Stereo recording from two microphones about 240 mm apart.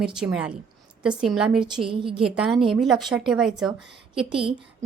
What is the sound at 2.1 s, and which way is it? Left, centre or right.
A woman's voice, centre.